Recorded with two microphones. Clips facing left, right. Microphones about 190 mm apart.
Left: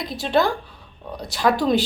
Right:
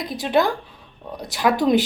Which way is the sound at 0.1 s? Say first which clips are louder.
Right 1 dB; 15° right (ahead or behind).